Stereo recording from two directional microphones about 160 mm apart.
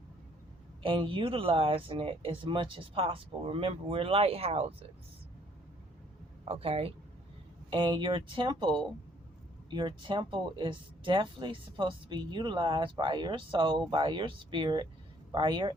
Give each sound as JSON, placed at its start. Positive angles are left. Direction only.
{"t": 0.8, "sound": "speech", "side_deg": -35}
{"t": 6.5, "sound": "speech", "side_deg": -35}